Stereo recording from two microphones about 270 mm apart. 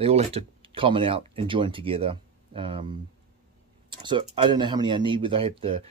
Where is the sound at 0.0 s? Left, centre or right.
Right.